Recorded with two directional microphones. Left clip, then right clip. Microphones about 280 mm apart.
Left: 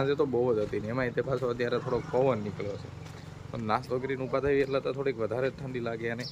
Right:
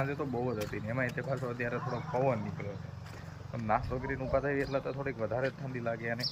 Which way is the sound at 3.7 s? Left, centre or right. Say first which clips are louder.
Left 2 dB; centre.